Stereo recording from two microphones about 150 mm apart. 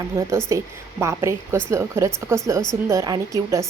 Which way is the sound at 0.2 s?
20° right (ahead or behind).